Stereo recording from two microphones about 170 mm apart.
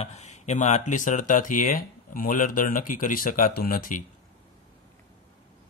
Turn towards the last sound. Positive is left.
turn(degrees=55)  # may be behind; listen again after turning